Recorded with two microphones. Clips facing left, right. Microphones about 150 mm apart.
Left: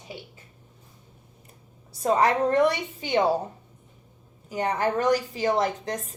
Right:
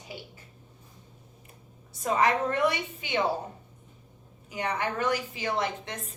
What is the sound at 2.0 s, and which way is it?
A woman's voice, 35° left (ahead or behind).